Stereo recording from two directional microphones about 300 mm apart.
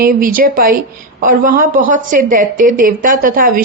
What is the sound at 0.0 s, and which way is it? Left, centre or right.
A woman's voice, right.